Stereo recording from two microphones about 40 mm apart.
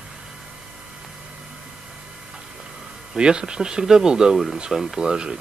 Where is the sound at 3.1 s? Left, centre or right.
Centre.